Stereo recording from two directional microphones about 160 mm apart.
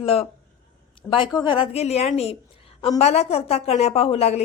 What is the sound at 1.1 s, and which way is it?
Speech, 30° left (ahead or behind).